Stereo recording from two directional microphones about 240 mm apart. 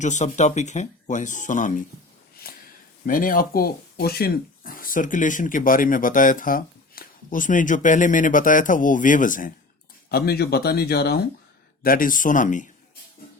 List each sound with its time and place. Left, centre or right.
0.0 s speech: left
3.1 s speech: left